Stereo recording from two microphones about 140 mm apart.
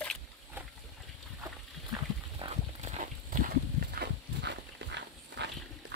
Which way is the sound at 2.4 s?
35° right (ahead or behind).